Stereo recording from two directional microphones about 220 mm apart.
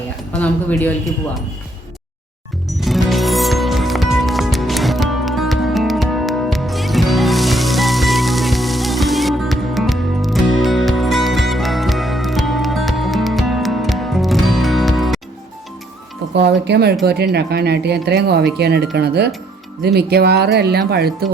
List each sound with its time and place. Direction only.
0.3 s speech: 5° left (ahead or behind)
2.7 s music: centre (ahead or behind)
16.3 s speech: 50° right (ahead or behind)